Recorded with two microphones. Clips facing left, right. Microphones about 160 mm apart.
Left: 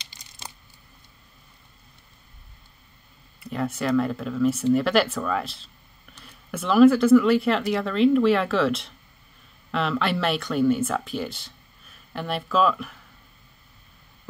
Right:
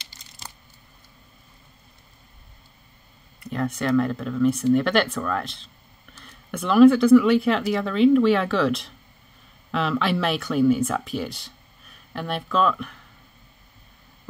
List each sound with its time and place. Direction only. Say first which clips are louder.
0.0 s typing: left 1 dB; 15° left (ahead or behind)
3.3 s speech: right 1 dB; 5° left (ahead or behind)